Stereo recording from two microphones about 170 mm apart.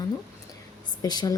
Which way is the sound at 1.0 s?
20° left (ahead or behind).